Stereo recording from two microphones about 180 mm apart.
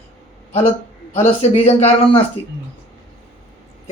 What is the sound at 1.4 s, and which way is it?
Speech, 35° left (ahead or behind).